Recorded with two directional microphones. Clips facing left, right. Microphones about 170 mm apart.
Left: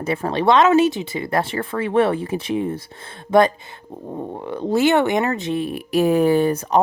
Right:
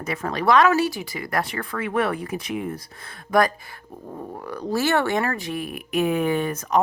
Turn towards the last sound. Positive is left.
turn(degrees=30)  # may be behind; listen again after turning